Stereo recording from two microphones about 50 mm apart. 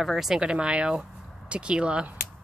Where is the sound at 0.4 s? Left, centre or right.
Centre.